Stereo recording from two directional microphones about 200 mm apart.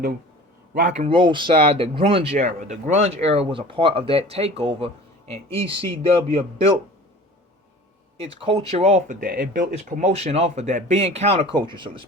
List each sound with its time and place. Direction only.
0.7 s speech: 45° right (ahead or behind)
0.9 s speech: 25° right (ahead or behind)
8.2 s speech: 30° right (ahead or behind)